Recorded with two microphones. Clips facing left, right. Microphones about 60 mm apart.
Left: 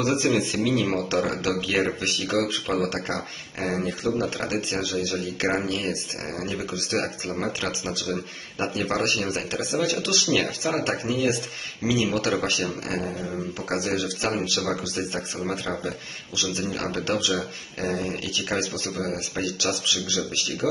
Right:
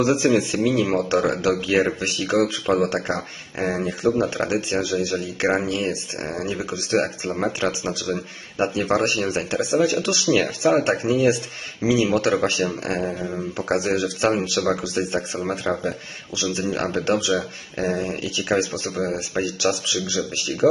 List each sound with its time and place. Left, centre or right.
0.0 s a man's voice: centre; by 20.2 s right